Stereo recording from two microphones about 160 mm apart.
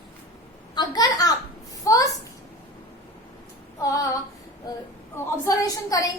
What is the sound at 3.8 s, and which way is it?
Speech, 20° left (ahead or behind).